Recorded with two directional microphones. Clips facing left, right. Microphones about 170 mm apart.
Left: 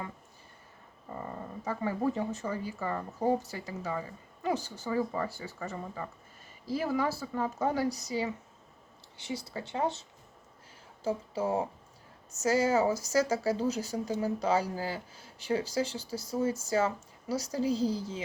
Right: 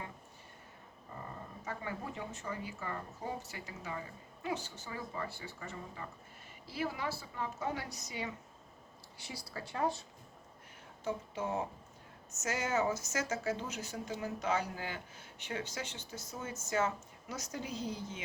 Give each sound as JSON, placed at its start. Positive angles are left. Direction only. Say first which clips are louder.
{"t": 1.6, "sound": "speech", "louder": "left 11 dB", "side_deg": 35}
{"t": 11.0, "sound": "speech", "louder": "left 6 dB", "side_deg": 30}